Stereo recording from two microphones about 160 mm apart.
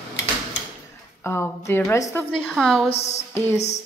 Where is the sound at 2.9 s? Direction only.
40° left (ahead or behind).